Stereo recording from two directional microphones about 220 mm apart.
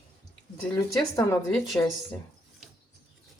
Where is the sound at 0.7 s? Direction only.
10° left (ahead or behind).